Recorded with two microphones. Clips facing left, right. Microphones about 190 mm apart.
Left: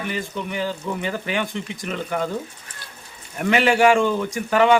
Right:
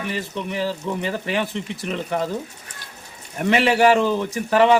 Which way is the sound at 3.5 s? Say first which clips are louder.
Even; centre (ahead or behind).